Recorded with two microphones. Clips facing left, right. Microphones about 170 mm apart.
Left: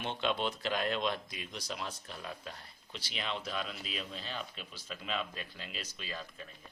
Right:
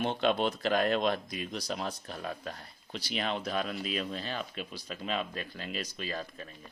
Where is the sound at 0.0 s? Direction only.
45° right (ahead or behind).